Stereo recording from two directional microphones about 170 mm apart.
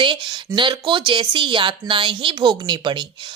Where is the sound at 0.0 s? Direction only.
30° right (ahead or behind).